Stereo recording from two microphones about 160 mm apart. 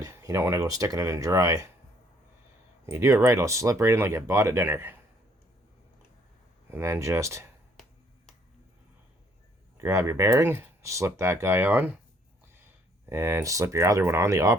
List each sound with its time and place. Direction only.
0.0 s speech: 20° right (ahead or behind)
2.8 s speech: 20° right (ahead or behind)
6.7 s speech: 15° right (ahead or behind)
9.7 s speech: 20° right (ahead or behind)
13.1 s speech: 15° right (ahead or behind)